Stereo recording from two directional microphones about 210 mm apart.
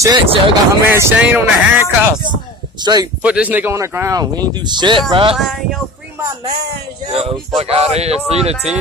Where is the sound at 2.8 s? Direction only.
20° right (ahead or behind).